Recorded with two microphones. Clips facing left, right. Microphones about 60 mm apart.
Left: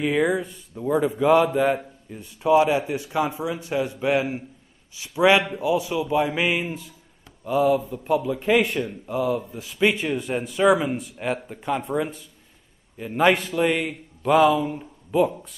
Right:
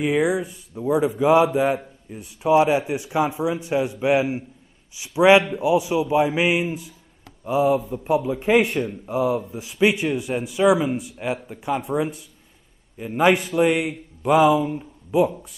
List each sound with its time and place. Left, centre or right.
0.0 s speech: centre
2.1 s a man's voice: centre